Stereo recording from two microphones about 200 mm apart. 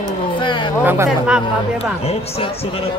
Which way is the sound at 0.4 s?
25° left (ahead or behind).